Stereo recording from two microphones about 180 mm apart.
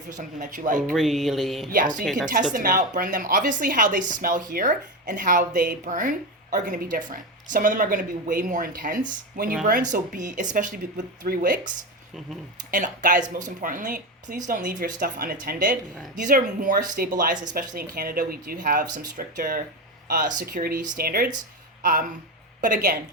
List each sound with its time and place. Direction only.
0.2 s a woman's voice: 45° right (ahead or behind)
0.9 s speech: centre (ahead or behind)
2.3 s a woman's voice: 45° right (ahead or behind)
12.7 s a woman's voice: 45° right (ahead or behind)
21.8 s a sound: 50° right (ahead or behind)
22.6 s a woman's voice: 45° right (ahead or behind)